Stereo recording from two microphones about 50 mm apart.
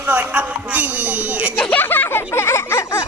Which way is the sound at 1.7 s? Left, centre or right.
Left.